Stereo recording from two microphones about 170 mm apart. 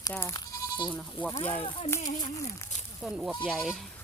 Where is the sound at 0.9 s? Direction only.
10° left (ahead or behind).